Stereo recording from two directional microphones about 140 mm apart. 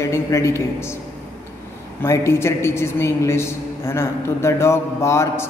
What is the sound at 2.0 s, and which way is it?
A man's voice, 20° left (ahead or behind).